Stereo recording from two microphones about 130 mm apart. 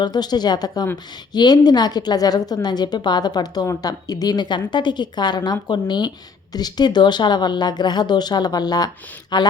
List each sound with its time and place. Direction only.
0.0 s a woman's voice: 30° left (ahead or behind)